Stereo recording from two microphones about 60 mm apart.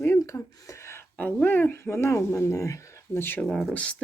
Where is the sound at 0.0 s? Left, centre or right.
Left.